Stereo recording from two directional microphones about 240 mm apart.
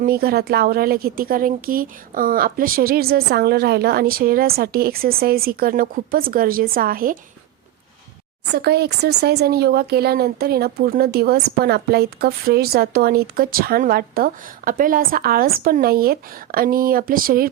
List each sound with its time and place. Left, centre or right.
0.0 s speech: right
8.5 s speech: right